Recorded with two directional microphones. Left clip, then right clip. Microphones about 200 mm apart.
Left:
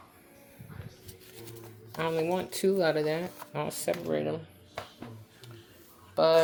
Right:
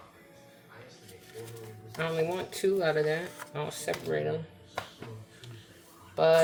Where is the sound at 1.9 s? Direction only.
45° left (ahead or behind).